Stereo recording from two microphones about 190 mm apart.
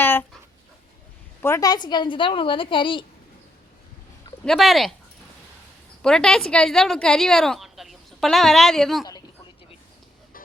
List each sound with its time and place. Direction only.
0.0 s dog: 10° left (ahead or behind)
1.4 s a woman's voice: 15° left (ahead or behind)
4.4 s a woman's voice: centre (ahead or behind)
6.0 s a woman's voice: 5° left (ahead or behind)